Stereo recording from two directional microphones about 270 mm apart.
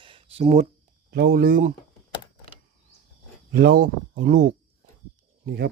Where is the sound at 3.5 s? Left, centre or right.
Right.